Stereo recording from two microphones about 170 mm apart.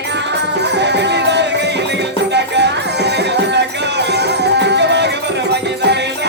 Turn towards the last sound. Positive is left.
turn(degrees=-85)